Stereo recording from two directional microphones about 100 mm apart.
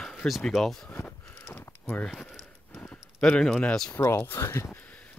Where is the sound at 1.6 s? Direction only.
15° left (ahead or behind).